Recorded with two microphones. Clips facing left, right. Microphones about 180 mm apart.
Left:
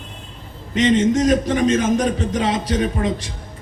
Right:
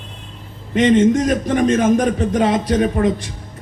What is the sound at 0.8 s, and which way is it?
A man's voice, 55° right (ahead or behind).